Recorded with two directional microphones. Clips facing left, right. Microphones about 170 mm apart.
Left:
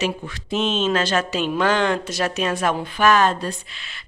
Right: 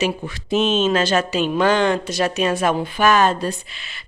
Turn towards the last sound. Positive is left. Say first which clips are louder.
# right 1 dB
turn(degrees=-5)  # may be behind; listen again after turning